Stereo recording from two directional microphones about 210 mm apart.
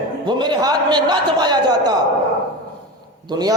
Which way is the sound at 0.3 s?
20° right (ahead or behind).